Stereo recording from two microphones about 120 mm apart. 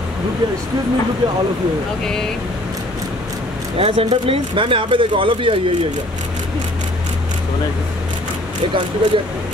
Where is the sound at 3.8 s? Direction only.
55° right (ahead or behind).